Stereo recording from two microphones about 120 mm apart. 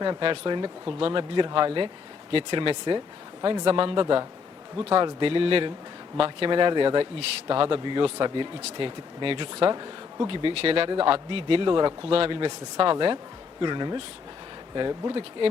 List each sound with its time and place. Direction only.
0.0 s a man's voice: 40° right (ahead or behind)
9.6 s speech: 30° right (ahead or behind)
10.2 s a man's voice: 45° right (ahead or behind)
11.3 s a man's voice: 50° right (ahead or behind)
12.1 s a man's voice: 45° right (ahead or behind)